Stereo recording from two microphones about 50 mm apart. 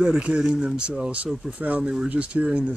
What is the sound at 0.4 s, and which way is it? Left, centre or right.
Speech, centre.